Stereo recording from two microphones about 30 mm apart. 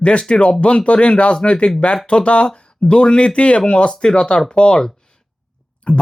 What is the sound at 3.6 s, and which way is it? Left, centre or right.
Speech, left.